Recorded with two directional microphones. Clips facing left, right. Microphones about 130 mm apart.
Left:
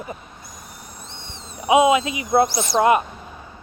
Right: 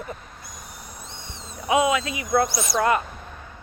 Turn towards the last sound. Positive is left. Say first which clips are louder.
# left 5 dB
turn(degrees=20)  # may be behind; listen again after turning